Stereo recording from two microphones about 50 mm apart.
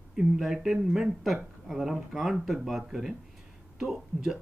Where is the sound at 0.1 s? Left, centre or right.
Centre.